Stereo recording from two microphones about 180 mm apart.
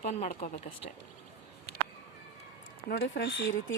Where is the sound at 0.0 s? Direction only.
40° left (ahead or behind).